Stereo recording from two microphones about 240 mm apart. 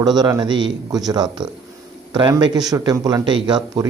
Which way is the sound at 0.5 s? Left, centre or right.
Right.